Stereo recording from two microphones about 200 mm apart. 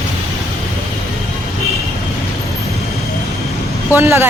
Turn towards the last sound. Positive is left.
turn(degrees=-15)  # may be behind; listen again after turning